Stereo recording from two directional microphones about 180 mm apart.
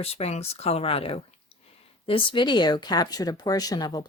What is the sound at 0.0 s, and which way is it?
Speech, 35° left (ahead or behind).